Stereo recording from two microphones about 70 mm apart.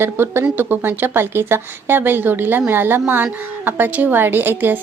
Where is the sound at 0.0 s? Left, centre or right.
Right.